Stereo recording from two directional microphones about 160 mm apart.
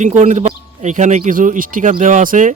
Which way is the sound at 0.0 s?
50° right (ahead or behind).